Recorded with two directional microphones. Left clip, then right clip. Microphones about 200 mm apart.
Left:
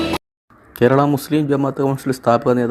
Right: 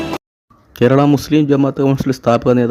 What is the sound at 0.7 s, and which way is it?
Speech, 35° right (ahead or behind).